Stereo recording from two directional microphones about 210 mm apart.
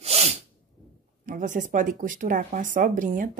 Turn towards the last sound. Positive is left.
turn(degrees=-40)  # may be behind; listen again after turning